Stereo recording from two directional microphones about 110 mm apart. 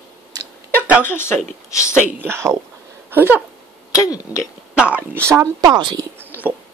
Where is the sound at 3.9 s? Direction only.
30° left (ahead or behind).